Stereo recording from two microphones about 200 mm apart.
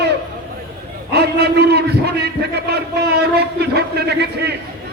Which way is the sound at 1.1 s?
55° right (ahead or behind).